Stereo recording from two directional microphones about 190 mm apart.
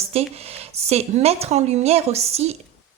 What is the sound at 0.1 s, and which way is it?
A woman's voice, 30° right (ahead or behind).